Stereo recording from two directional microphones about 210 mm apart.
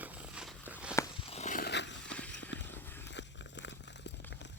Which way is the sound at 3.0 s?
55° left (ahead or behind).